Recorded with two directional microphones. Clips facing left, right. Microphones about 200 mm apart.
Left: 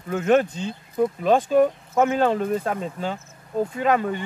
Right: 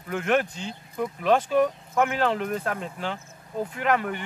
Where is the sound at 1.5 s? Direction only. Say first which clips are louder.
Left 4 dB; 25° left (ahead or behind).